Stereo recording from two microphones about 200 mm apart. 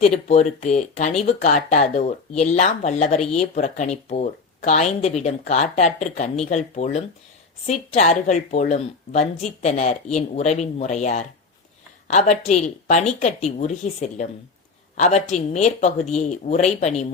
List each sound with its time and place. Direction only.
0.0 s speech: 35° left (ahead or behind)